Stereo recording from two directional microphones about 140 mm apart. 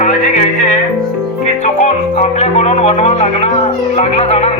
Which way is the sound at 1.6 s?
60° left (ahead or behind).